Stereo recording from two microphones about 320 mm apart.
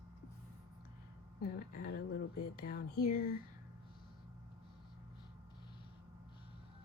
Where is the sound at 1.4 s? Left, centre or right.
Left.